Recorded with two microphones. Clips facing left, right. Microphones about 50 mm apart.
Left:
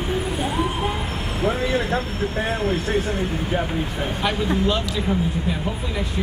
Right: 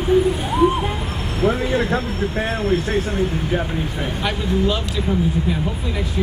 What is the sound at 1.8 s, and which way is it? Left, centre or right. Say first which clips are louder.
Vehicle: right 3 dB; centre.